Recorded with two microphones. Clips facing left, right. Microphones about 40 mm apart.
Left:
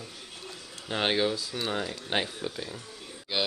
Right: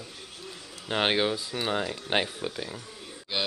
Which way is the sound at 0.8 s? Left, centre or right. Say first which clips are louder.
Right 1 dB; centre.